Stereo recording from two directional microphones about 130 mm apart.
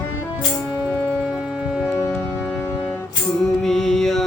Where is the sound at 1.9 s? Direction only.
20° left (ahead or behind).